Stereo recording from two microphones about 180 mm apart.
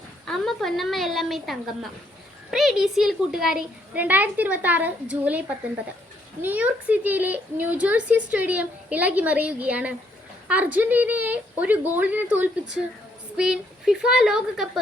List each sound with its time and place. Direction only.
0.3 s a child's voice: centre (ahead or behind)